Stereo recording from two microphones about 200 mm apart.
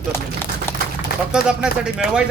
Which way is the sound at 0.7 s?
10° left (ahead or behind).